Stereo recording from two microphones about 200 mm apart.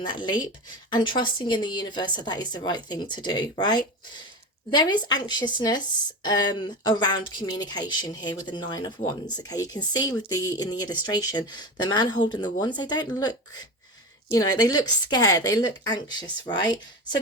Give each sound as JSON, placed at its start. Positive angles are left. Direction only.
{"t": 0.1, "sound": "speech", "side_deg": 25}